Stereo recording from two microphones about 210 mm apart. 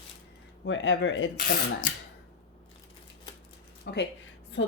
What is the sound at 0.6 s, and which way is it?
Speech, 60° left (ahead or behind).